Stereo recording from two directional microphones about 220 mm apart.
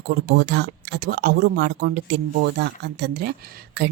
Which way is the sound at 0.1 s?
50° right (ahead or behind).